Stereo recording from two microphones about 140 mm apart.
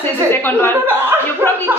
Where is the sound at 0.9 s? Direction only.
15° right (ahead or behind).